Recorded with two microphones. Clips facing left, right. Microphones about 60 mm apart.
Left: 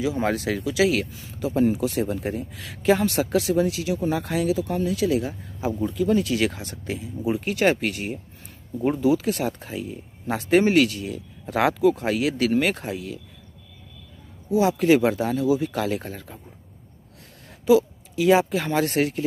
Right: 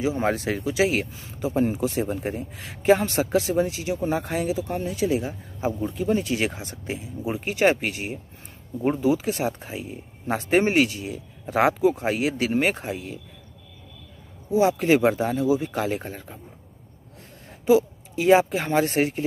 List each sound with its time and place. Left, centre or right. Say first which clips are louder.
0.0 s speech: even; right
14.5 s speech: left 1 dB; right
17.6 s speech: left 1 dB; right